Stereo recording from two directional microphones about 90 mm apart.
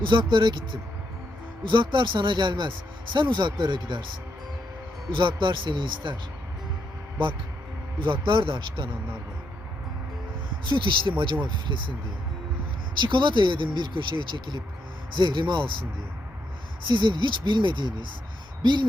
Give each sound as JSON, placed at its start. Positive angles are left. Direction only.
{"t": 0.1, "sound": "speech", "side_deg": -60}
{"t": 5.1, "sound": "speech", "side_deg": -60}
{"t": 7.9, "sound": "speech", "side_deg": -65}
{"t": 10.7, "sound": "speech", "side_deg": -65}
{"t": 12.9, "sound": "speech", "side_deg": -60}